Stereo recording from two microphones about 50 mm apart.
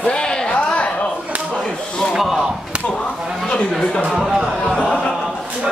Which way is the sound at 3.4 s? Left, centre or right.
Centre.